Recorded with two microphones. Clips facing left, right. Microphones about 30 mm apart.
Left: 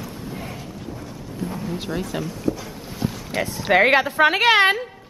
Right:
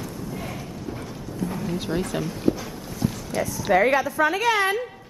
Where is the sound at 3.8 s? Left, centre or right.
Left.